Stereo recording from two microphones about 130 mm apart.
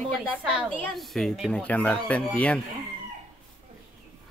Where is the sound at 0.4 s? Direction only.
10° right (ahead or behind); by 2.6 s 10° left (ahead or behind).